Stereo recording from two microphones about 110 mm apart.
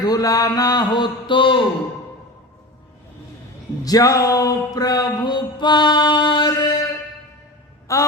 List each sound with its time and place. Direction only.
0.0 s mantra: 35° left (ahead or behind)
3.8 s mantra: 35° left (ahead or behind)
7.9 s a sound: 30° left (ahead or behind)